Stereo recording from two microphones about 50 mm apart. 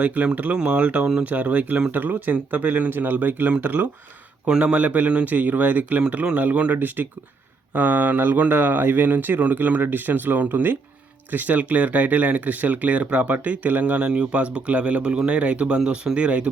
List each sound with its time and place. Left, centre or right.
0.0 s speech: right